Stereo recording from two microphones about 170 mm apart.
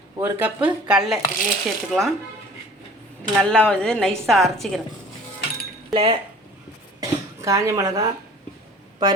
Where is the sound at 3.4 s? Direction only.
5° left (ahead or behind).